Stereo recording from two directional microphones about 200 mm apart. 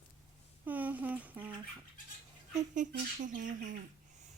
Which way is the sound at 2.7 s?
40° right (ahead or behind).